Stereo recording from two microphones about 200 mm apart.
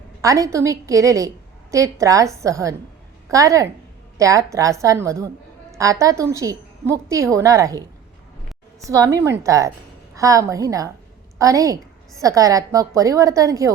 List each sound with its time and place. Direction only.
0.2 s a woman's voice: 15° right (ahead or behind)
8.9 s a woman's voice: 15° right (ahead or behind)